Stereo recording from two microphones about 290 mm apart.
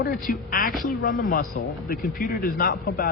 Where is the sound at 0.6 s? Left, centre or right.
Centre.